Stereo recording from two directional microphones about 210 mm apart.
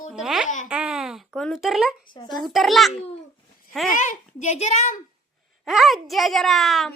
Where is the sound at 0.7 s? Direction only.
5° right (ahead or behind).